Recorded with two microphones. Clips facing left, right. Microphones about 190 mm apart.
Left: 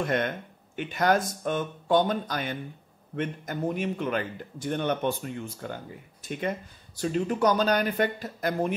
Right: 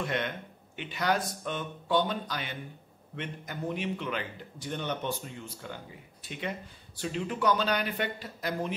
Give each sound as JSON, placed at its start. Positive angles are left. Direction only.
{"t": 0.0, "sound": "a man's voice", "side_deg": 45}